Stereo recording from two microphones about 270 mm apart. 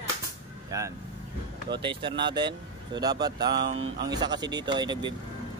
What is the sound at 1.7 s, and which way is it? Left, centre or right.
Speech, centre.